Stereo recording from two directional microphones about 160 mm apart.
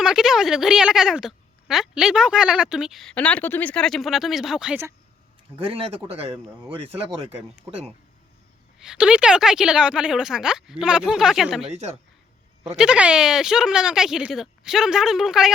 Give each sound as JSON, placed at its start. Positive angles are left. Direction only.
{"t": 0.0, "sound": "a woman's voice", "side_deg": -5}
{"t": 5.5, "sound": "speech", "side_deg": -35}
{"t": 8.8, "sound": "a woman's voice", "side_deg": -5}
{"t": 12.7, "sound": "a woman's voice", "side_deg": -5}